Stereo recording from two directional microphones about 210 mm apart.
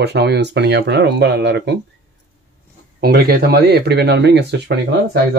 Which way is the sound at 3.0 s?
45° right (ahead or behind).